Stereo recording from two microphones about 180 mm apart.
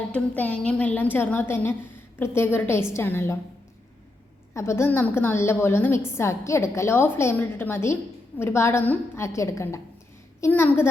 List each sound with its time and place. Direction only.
0.1 s a woman's voice: 5° left (ahead or behind)
4.5 s a woman's voice: 15° left (ahead or behind)